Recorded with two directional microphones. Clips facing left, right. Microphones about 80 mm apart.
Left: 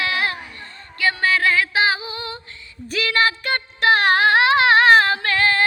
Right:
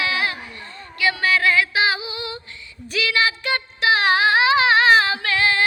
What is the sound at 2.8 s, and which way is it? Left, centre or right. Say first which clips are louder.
Child singing: left 1 dB; left.